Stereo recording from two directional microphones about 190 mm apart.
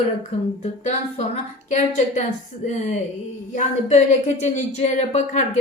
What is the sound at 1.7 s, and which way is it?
Speech, 40° left (ahead or behind).